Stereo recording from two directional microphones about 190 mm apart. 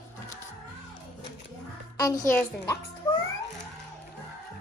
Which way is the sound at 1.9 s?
15° left (ahead or behind).